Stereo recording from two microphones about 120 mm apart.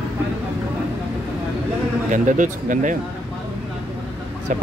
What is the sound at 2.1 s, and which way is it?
Speech, 90° right.